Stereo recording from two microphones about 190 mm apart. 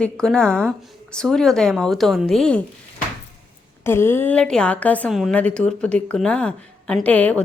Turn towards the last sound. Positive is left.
turn(degrees=10)  # may be behind; listen again after turning